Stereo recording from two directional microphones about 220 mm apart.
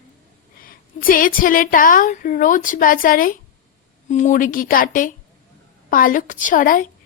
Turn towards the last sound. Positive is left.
turn(degrees=40)  # may be behind; listen again after turning